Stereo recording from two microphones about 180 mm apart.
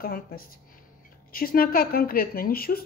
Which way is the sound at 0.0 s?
55° left (ahead or behind).